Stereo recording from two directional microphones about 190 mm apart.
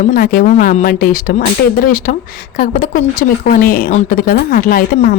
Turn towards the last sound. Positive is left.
turn(degrees=45)  # may be behind; listen again after turning